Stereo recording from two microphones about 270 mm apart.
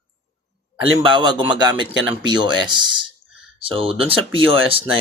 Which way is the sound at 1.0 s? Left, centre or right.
Centre.